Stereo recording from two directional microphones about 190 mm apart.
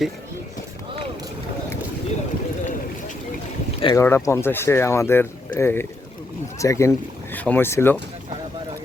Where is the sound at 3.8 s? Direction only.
25° left (ahead or behind).